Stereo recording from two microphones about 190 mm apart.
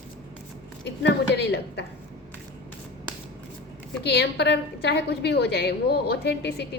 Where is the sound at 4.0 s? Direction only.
60° left (ahead or behind).